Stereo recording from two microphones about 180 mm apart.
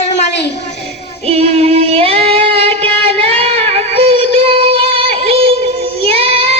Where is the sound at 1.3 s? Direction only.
35° right (ahead or behind).